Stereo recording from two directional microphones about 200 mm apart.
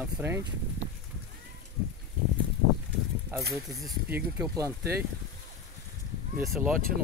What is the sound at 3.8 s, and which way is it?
Speech, 5° right (ahead or behind).